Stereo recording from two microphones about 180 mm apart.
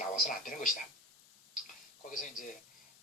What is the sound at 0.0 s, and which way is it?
Speech, 50° left (ahead or behind).